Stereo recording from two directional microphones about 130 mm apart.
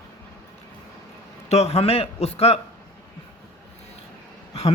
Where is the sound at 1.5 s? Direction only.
55° left (ahead or behind).